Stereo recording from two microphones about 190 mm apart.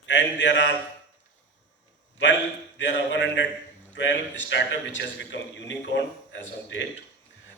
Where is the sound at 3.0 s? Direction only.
70° left (ahead or behind).